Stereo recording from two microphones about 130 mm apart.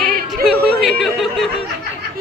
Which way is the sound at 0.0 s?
Centre (ahead or behind).